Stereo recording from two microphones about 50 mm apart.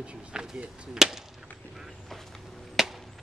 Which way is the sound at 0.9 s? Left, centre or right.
Centre.